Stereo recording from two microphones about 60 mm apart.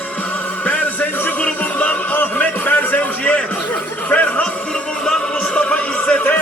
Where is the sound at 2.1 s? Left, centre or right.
Left.